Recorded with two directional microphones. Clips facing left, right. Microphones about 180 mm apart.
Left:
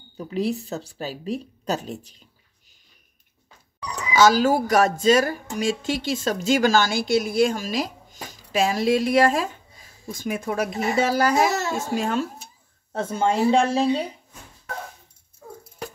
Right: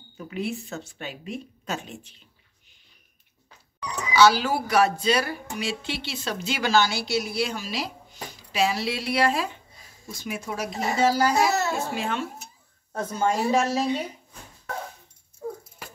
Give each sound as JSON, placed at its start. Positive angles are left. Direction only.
{"t": 0.2, "sound": "a woman's voice", "side_deg": 35}
{"t": 4.1, "sound": "speech", "side_deg": 45}
{"t": 12.9, "sound": "speech", "side_deg": 25}